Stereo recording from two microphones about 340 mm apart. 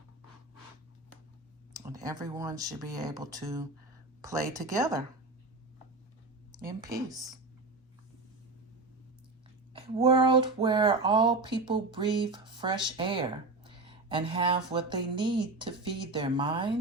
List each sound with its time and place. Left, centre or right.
1.7 s speech: centre
6.8 s speech: centre
9.9 s speech: centre